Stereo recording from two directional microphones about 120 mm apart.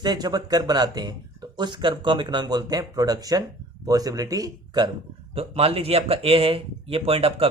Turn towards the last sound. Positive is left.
turn(degrees=-55)  # may be behind; listen again after turning